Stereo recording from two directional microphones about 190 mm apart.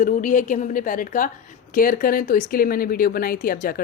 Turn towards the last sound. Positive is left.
turn(degrees=50)  # may be behind; listen again after turning